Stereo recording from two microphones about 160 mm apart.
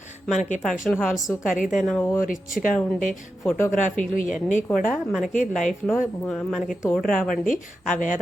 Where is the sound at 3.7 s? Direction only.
50° left (ahead or behind).